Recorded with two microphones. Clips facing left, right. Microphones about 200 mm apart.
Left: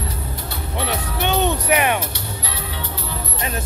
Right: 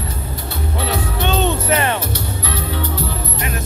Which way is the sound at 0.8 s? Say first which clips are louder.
Right 2 dB; 15° left (ahead or behind).